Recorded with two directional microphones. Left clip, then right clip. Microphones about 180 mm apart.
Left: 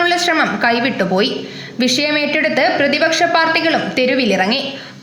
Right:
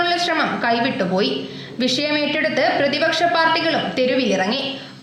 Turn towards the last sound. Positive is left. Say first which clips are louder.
# left 4 dB
turn(degrees=20)  # may be behind; listen again after turning